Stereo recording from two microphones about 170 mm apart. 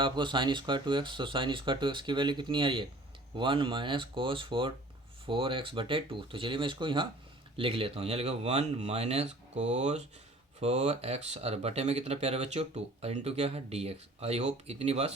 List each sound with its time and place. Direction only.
0.0 s speech: 30° right (ahead or behind)